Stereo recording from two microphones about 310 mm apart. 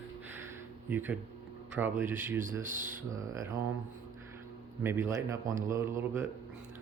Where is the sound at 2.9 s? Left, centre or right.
Centre.